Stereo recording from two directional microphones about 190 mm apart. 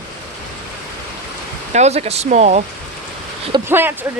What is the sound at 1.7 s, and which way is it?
Speech, 35° right (ahead or behind).